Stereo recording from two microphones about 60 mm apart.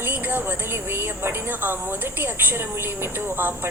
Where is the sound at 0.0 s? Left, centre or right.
Right.